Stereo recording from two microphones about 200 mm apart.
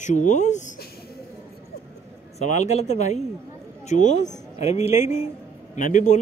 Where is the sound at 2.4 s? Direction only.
35° left (ahead or behind).